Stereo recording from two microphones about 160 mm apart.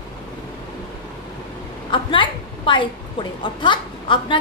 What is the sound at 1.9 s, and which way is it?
A woman's voice, 30° left (ahead or behind).